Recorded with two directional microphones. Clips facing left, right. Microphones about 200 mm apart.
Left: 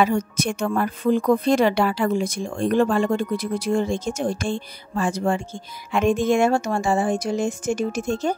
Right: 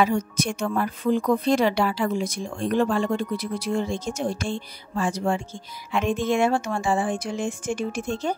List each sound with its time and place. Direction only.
0.0 s speech: 55° left (ahead or behind)